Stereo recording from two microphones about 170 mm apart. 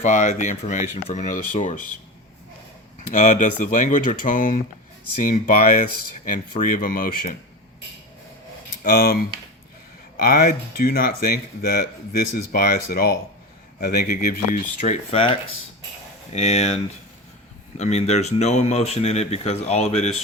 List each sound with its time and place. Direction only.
0.0 s speech: 45° left (ahead or behind)
3.1 s speech: 45° left (ahead or behind)
8.8 s speech: 60° left (ahead or behind)
15.1 s speech: 30° left (ahead or behind)
17.7 s speech: 40° left (ahead or behind)